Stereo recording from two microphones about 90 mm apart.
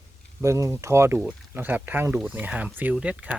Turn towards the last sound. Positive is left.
turn(degrees=-15)  # may be behind; listen again after turning